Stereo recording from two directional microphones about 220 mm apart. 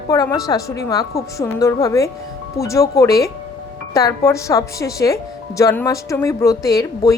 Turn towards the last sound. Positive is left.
turn(degrees=15)  # may be behind; listen again after turning